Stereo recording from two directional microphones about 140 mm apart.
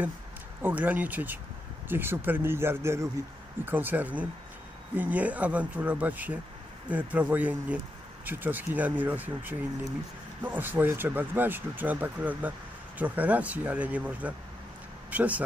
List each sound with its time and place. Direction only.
0.6 s speech: 15° right (ahead or behind)